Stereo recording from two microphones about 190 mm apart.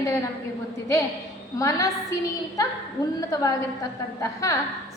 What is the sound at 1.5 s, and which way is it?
Speech, 15° left (ahead or behind).